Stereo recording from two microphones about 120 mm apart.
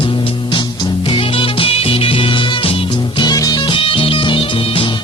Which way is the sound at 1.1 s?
45° left (ahead or behind).